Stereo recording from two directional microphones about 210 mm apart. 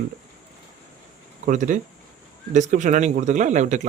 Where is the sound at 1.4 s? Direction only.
35° right (ahead or behind).